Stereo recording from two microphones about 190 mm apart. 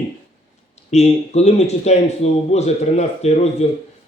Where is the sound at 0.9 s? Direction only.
35° left (ahead or behind).